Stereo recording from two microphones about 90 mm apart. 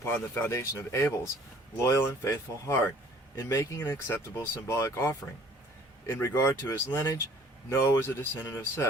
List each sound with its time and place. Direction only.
0.0 s speech: 25° left (ahead or behind)